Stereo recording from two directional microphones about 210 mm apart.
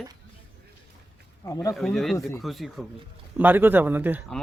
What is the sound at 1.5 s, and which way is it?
Speech, 15° left (ahead or behind).